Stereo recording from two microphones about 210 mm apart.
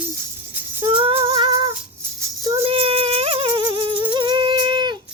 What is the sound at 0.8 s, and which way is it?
Music, 25° right (ahead or behind).